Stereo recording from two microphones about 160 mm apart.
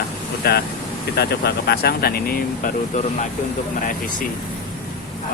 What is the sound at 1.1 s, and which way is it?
Speech, 90° left.